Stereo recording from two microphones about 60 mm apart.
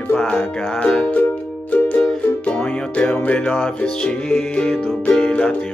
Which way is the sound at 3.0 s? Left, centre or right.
Left.